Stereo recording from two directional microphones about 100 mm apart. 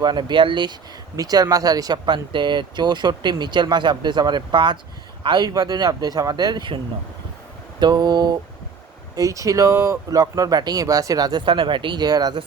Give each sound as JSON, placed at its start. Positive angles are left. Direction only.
{"t": 0.0, "sound": "speech", "side_deg": -50}
{"t": 1.1, "sound": "speech", "side_deg": -40}
{"t": 7.8, "sound": "speech", "side_deg": -45}
{"t": 9.1, "sound": "speech", "side_deg": -35}